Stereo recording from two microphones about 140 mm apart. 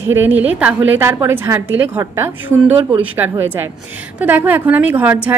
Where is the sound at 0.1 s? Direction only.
15° right (ahead or behind).